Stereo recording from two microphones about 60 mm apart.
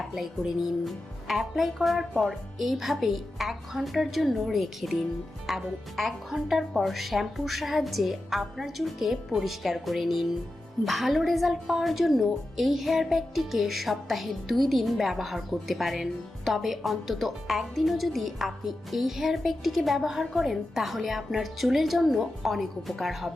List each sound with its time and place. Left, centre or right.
0.0 s a woman's voice: centre